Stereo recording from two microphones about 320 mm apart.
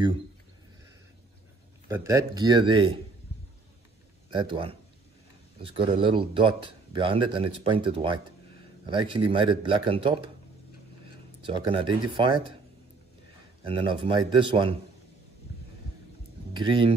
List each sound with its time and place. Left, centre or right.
1.9 s speech: centre
4.3 s speech: centre
11.4 s speech: centre
13.7 s speech: centre
16.5 s speech: centre